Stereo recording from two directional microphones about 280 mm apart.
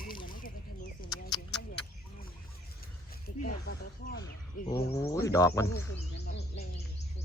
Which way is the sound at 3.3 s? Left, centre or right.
Left.